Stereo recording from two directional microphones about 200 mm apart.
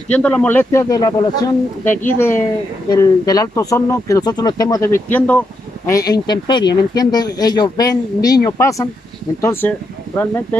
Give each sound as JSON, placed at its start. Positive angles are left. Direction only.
{"t": 0.1, "sound": "speech", "side_deg": 5}